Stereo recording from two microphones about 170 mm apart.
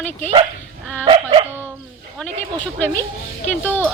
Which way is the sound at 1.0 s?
30° right (ahead or behind).